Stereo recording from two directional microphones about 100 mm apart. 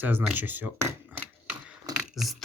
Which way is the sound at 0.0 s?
20° right (ahead or behind).